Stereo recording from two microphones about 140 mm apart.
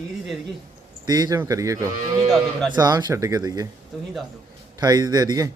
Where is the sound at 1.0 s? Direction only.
30° right (ahead or behind).